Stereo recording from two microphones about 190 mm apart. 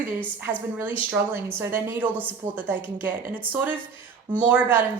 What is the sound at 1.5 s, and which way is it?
Speech, 10° right (ahead or behind).